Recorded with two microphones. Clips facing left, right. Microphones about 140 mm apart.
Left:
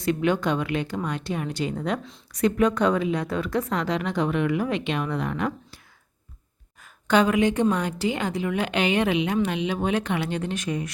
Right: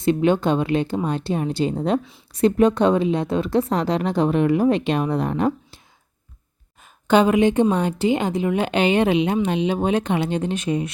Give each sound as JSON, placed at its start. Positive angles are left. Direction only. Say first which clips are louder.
{"t": 0.0, "sound": "a woman's voice", "louder": "right 5 dB", "side_deg": -30}
{"t": 6.8, "sound": "a woman's voice", "louder": "right 4 dB", "side_deg": -20}